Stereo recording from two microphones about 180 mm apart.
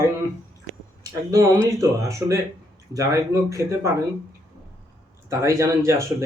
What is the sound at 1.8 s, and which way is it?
Speech, 15° right (ahead or behind).